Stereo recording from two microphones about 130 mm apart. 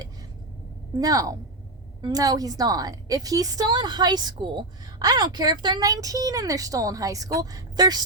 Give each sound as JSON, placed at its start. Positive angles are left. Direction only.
{"t": 0.9, "sound": "a woman's voice", "side_deg": -25}